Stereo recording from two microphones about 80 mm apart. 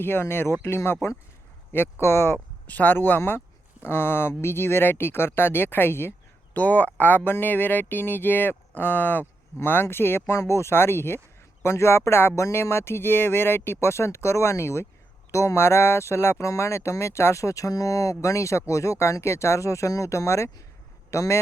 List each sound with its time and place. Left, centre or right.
0.0 s a man's voice: left